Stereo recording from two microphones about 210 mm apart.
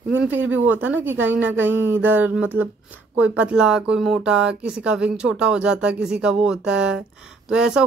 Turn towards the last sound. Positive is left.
turn(degrees=-5)  # may be behind; listen again after turning